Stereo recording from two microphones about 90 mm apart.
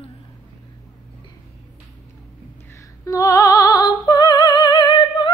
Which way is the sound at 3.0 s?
35° left (ahead or behind).